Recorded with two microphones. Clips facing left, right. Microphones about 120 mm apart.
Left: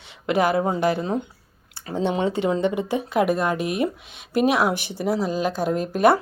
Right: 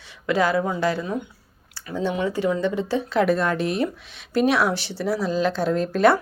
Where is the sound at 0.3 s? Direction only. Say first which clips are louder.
Left 1 dB; 20° left (ahead or behind).